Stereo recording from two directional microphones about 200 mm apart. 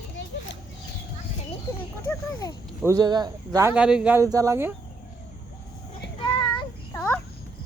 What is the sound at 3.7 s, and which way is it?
A man's voice, 5° right (ahead or behind).